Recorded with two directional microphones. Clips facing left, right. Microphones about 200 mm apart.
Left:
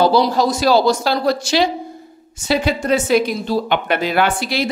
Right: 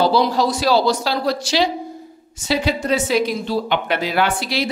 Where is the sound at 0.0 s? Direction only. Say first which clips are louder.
Left 2 dB; 45° left (ahead or behind).